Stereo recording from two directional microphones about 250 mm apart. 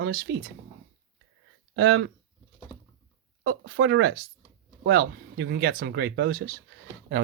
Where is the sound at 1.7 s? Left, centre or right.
Right.